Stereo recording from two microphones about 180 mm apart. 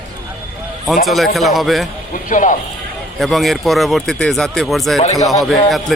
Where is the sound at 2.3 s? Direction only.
45° left (ahead or behind).